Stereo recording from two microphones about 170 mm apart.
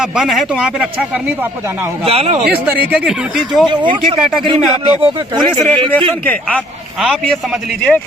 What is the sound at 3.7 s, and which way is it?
Speech, 30° right (ahead or behind).